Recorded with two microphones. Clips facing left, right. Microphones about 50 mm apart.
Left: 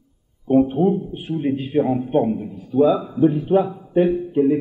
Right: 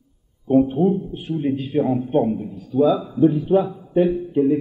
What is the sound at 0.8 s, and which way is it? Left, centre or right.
A man's voice, left.